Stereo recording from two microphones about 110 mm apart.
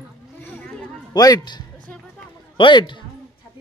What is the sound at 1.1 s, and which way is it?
A man's voice, 35° left (ahead or behind).